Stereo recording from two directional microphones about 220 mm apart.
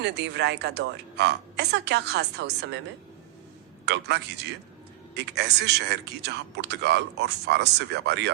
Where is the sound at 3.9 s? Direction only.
50° right (ahead or behind).